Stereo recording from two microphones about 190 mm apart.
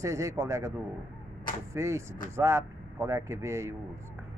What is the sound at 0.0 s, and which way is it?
Speech, 15° right (ahead or behind).